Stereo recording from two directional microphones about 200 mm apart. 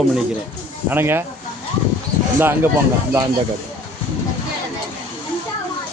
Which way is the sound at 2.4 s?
10° right (ahead or behind).